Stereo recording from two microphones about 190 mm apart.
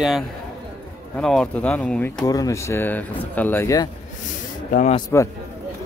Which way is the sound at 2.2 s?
20° left (ahead or behind).